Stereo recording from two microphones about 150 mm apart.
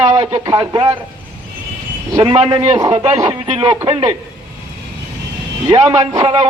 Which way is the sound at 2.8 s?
25° right (ahead or behind).